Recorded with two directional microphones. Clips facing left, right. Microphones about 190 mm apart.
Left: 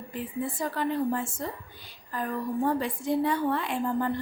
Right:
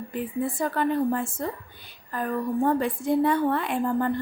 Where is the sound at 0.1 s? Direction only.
55° right (ahead or behind).